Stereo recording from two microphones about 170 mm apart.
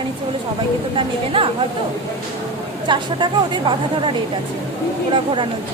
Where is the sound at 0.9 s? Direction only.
30° right (ahead or behind).